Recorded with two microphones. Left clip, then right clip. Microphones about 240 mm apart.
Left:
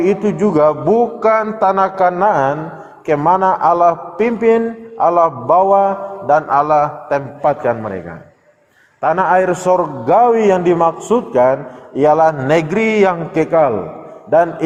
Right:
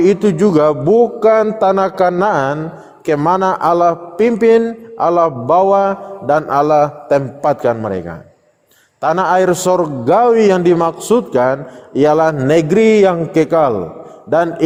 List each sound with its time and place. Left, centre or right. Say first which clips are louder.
0.0 s a man's voice: right 3 dB; right
0.3 s a man's voice: right 2 dB; right
0.6 s a man's voice: even; right
3.1 s a man's voice: left 1 dB; right
4.3 s a man's voice: right 3 dB; right
9.0 s a man's voice: even; right